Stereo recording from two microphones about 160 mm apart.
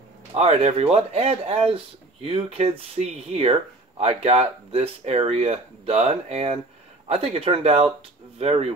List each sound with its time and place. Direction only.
0.3 s speech: 40° right (ahead or behind)